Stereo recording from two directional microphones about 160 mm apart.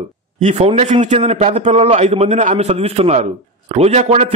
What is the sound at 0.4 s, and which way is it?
A man's voice, 45° right (ahead or behind).